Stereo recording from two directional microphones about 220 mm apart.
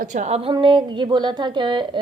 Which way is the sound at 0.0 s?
35° right (ahead or behind).